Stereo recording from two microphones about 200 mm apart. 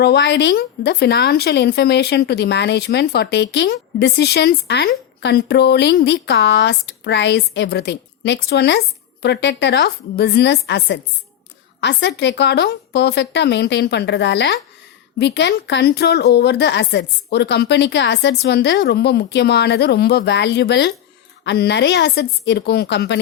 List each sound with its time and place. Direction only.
0.0 s a woman's voice: 55° left (ahead or behind)